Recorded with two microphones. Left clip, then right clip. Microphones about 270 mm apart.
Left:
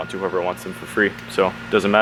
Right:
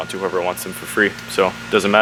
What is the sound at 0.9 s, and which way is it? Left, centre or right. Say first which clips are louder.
Speech: right 2 dB; centre.